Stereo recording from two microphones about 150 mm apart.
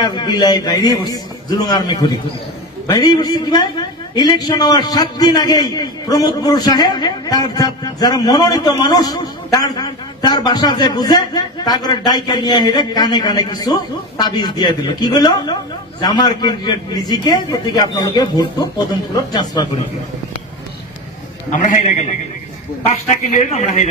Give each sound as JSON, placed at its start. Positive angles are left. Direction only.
{"t": 0.0, "sound": "a man's voice", "side_deg": 30}
{"t": 21.5, "sound": "a man's voice", "side_deg": 55}